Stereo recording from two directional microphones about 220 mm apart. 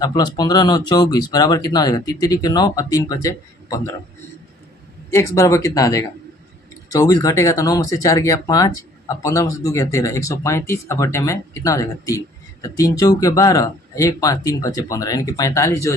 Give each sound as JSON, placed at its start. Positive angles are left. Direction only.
{"t": 0.0, "sound": "speech", "side_deg": 20}
{"t": 5.1, "sound": "speech", "side_deg": 15}